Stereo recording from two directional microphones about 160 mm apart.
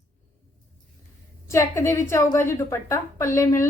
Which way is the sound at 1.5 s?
15° left (ahead or behind).